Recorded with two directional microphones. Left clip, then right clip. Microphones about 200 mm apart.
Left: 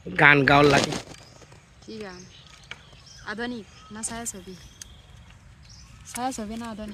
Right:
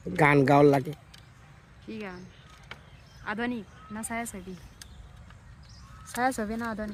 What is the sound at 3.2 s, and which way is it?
Speech, 45° right (ahead or behind).